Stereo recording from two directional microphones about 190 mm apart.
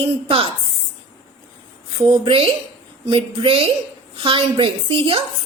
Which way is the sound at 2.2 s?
30° right (ahead or behind).